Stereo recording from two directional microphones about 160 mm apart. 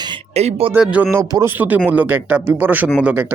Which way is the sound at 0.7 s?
10° right (ahead or behind).